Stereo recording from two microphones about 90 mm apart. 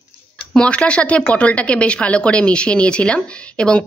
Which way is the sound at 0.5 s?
10° left (ahead or behind).